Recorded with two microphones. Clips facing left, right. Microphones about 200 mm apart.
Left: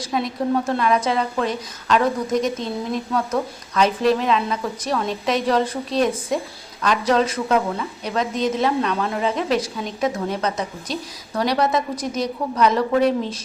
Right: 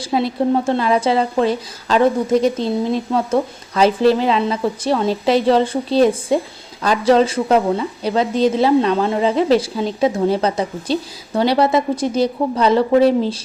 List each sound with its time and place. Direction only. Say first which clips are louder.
0.0 s a woman's voice: right 5 dB; 30° right (ahead or behind)